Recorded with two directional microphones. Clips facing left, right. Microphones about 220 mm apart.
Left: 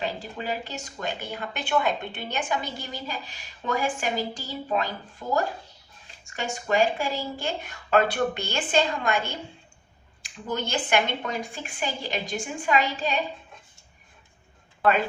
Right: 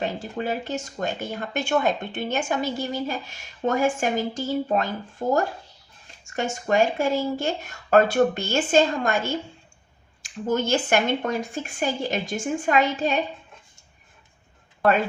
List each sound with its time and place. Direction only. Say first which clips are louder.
0.0 s speech: right 4 dB; 45° right (ahead or behind)
10.2 s speech: right 7 dB; 45° right (ahead or behind)